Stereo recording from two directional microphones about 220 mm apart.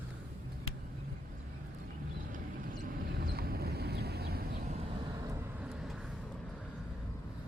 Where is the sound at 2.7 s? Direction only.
40° right (ahead or behind).